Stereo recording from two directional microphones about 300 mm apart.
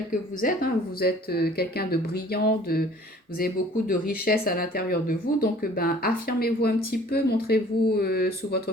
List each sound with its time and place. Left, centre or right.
0.1 s speech: left